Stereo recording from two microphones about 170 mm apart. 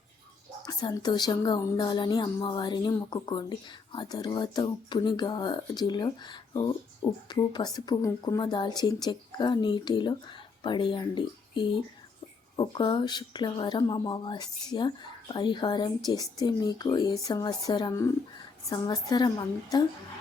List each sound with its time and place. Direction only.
0.6 s a woman's voice: 25° left (ahead or behind)